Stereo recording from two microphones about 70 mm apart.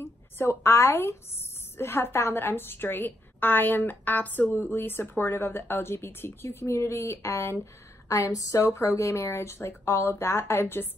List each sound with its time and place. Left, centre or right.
0.0 s a woman's voice: left
8.1 s speech: left